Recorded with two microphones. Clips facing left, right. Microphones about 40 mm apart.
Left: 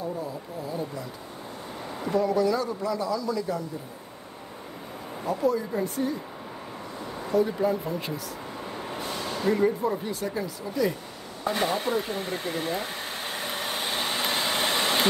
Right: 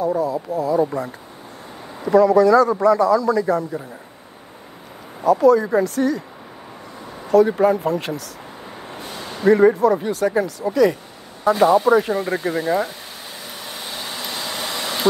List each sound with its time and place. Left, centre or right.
0.0 s speech: right
2.1 s a man's voice: right
5.2 s speech: right
7.2 s a man's voice: right
9.1 s a sound: centre
9.5 s speech: right
9.8 s speech: right
11.6 s speech: right
12.8 s vehicle: left